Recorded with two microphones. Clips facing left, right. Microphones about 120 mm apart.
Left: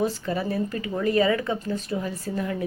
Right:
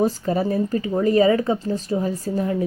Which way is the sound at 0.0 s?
40° right (ahead or behind).